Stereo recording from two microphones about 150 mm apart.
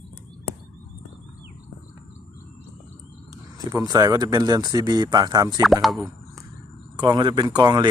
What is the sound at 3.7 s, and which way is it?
Speech, 25° right (ahead or behind).